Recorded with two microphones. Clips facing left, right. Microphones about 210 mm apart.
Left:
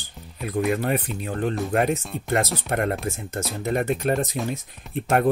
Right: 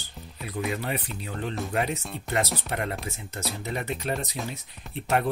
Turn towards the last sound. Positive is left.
turn(degrees=50)  # may be behind; listen again after turning